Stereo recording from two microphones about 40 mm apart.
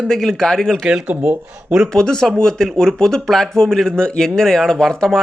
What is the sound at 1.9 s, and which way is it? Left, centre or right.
A man's voice, centre.